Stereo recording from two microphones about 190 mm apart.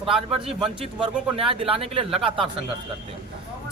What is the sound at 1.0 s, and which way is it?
Speech, 30° right (ahead or behind).